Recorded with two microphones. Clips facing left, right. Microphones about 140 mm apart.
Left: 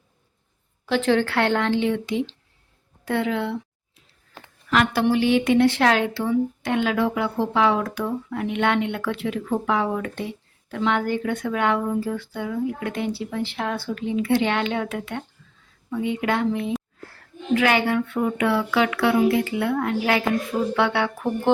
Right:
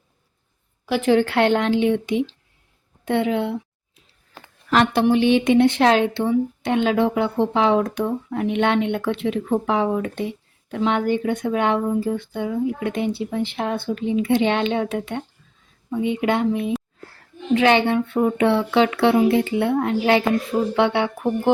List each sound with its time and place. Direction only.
0.9 s speech: 15° right (ahead or behind)
4.9 s speech: 20° right (ahead or behind)